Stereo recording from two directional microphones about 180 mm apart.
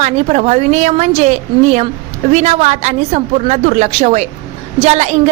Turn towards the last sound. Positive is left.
turn(degrees=-40)  # may be behind; listen again after turning